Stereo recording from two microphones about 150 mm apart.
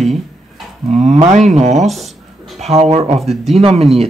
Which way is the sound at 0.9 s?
50° right (ahead or behind).